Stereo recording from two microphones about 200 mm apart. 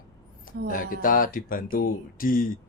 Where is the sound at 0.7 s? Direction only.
45° left (ahead or behind).